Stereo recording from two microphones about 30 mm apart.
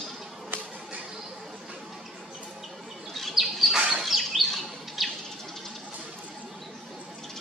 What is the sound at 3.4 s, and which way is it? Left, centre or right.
Bird, centre.